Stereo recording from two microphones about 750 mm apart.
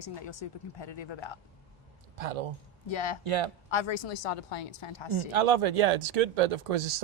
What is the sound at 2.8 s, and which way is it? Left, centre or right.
Speech, left.